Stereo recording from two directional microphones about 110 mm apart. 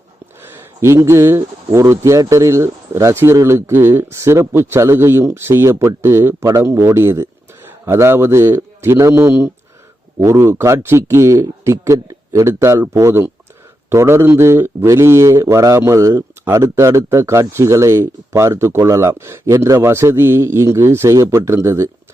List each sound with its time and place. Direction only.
0.4 s speech: 20° right (ahead or behind)